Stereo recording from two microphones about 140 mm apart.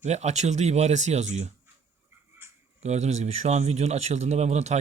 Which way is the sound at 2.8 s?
55° right (ahead or behind).